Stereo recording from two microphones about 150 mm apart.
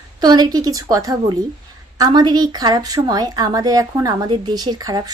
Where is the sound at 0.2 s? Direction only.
30° right (ahead or behind).